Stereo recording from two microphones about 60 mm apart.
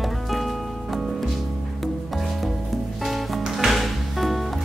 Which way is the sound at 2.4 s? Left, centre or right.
Centre.